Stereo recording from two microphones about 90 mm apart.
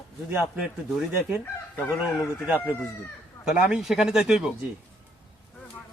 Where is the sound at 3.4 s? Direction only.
5° right (ahead or behind).